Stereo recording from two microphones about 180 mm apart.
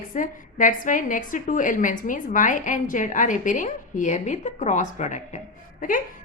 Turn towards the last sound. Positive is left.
turn(degrees=50)  # may be behind; listen again after turning